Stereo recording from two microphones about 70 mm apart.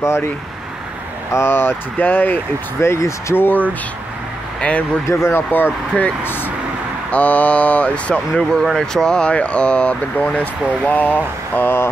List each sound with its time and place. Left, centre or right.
0.0 s speech: left
1.3 s speech: left
2.9 s speech: left
3.4 s speech: left
5.0 s speech: left
5.5 s speech: left